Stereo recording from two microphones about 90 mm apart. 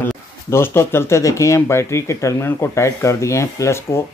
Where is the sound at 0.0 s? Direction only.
30° left (ahead or behind).